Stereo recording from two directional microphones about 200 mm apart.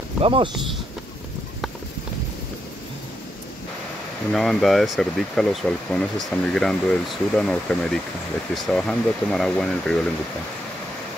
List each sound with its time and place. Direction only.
0.2 s speech: 25° right (ahead or behind)
4.3 s speech: centre (ahead or behind)